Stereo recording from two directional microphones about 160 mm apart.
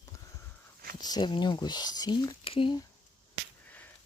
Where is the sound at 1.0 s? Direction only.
25° left (ahead or behind).